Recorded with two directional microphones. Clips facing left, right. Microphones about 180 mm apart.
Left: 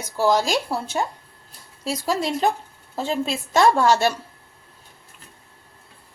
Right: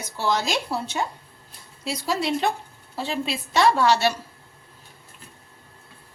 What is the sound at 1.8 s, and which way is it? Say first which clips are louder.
A woman's voice: left 2 dB; 45° left (ahead or behind).